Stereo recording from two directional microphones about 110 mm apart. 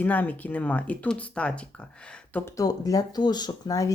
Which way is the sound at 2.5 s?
30° left (ahead or behind).